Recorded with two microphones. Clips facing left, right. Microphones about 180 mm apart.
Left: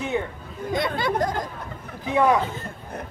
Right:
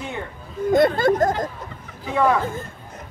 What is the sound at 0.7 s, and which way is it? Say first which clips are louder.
Speech: right 8 dB; 50° right (ahead or behind).